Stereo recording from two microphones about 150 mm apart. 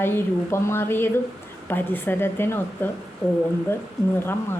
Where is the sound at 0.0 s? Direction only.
15° left (ahead or behind).